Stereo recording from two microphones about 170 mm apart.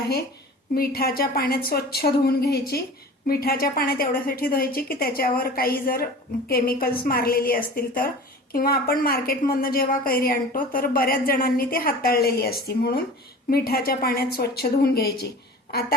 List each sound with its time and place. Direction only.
0.7 s a woman's voice: 65° left (ahead or behind)